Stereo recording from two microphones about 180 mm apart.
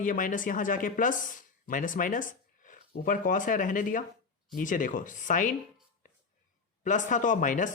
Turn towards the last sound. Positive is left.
turn(degrees=45)  # may be behind; listen again after turning